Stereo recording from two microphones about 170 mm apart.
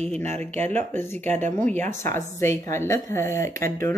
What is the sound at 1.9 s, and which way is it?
Speech, 15° left (ahead or behind).